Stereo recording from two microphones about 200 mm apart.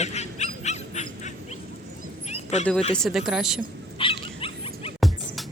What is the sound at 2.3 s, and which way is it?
Bow-wow, 35° left (ahead or behind).